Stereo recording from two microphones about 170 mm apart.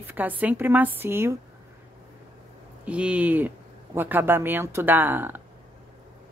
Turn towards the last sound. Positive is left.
turn(degrees=-10)  # may be behind; listen again after turning